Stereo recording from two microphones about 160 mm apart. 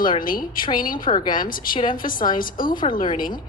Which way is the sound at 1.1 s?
25° left (ahead or behind).